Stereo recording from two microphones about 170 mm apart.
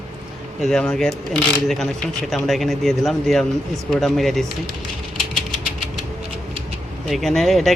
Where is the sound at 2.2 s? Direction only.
Centre (ahead or behind).